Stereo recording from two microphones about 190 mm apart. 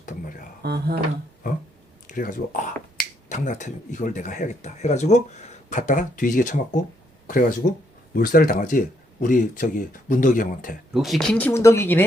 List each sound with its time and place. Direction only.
0.6 s speech: 60° right (ahead or behind)
2.0 s speech: 45° left (ahead or behind)
10.9 s speech: centre (ahead or behind)